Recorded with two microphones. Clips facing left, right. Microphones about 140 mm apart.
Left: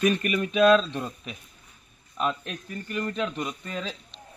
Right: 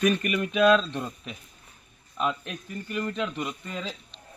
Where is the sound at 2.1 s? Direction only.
5° right (ahead or behind).